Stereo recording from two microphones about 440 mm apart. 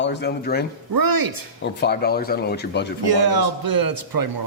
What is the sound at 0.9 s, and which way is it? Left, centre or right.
Speech, right.